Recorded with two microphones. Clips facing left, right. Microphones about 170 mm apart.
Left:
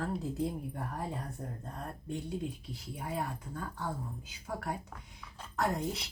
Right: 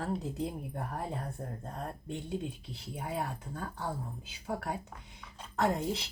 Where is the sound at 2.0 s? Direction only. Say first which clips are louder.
Left 2 dB; 25° right (ahead or behind).